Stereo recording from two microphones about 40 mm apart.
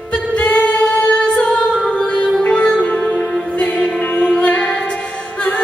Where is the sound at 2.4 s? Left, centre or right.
Left.